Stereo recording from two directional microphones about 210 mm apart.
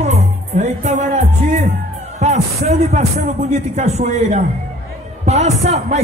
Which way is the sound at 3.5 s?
35° right (ahead or behind).